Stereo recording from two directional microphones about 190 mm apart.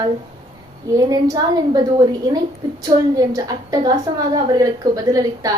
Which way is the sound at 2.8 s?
20° right (ahead or behind).